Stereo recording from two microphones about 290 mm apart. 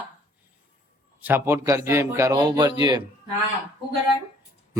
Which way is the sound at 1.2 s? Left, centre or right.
Centre.